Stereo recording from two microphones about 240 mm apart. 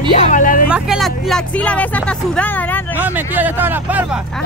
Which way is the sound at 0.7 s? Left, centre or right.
Centre.